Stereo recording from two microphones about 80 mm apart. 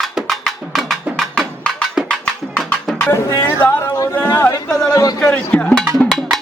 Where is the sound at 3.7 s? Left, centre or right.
Left.